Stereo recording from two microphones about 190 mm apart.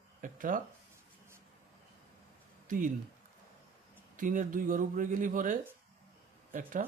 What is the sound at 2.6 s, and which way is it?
Speech, 45° right (ahead or behind).